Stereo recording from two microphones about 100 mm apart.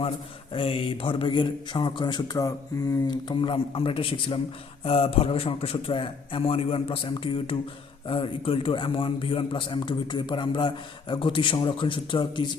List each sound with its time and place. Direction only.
0.5 s a man's voice: 65° left (ahead or behind); by 2.5 s 40° left (ahead or behind)
3.1 s a man's voice: 50° left (ahead or behind)